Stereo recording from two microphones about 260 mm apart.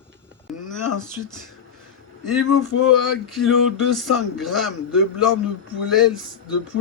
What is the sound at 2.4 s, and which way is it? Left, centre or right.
Male singing, left.